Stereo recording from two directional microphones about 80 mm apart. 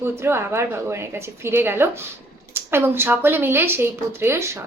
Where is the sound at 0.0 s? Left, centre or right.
Right.